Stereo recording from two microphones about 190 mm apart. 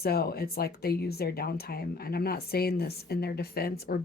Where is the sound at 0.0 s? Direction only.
55° left (ahead or behind).